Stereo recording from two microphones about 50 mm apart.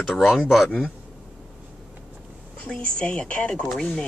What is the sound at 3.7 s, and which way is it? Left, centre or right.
Speech, centre.